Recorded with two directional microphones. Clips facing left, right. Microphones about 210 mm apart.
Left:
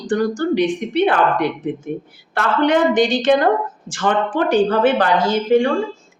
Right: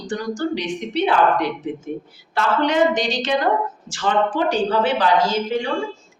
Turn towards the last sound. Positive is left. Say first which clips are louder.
# left 6 dB
turn(degrees=55)  # may be behind; listen again after turning